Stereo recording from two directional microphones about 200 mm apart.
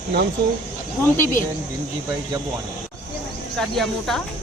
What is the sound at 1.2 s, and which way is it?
Speech, 40° left (ahead or behind).